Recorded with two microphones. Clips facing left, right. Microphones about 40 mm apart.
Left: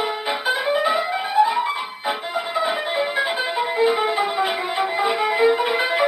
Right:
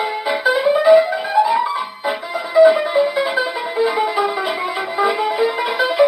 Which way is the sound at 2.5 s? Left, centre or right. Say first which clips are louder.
Right 12 dB; left.